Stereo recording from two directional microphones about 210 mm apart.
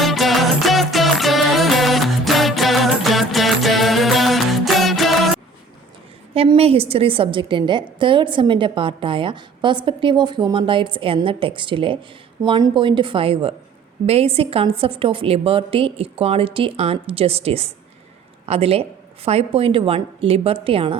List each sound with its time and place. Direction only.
0.0 s music: centre (ahead or behind)
6.3 s a woman's voice: 30° right (ahead or behind)